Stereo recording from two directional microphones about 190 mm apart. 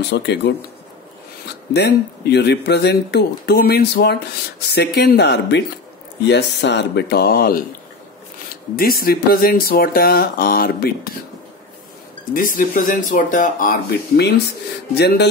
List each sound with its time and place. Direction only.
0.1 s speech: 60° left (ahead or behind)
1.7 s speech: 60° left (ahead or behind)
8.7 s speech: 50° left (ahead or behind)
12.4 s speech: 45° left (ahead or behind)